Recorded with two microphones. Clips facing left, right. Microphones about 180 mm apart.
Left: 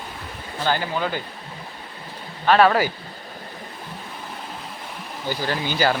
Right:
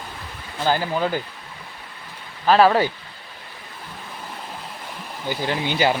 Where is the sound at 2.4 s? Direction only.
Centre (ahead or behind).